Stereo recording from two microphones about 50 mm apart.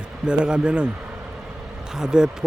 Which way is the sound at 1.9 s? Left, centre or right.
Centre.